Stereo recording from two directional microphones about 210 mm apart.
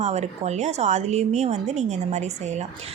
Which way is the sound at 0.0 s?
30° right (ahead or behind).